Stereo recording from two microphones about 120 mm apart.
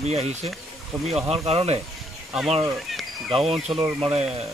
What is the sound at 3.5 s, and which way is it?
Speech, 5° right (ahead or behind).